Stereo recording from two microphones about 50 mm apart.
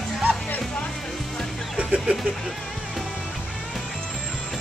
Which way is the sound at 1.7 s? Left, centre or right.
Right.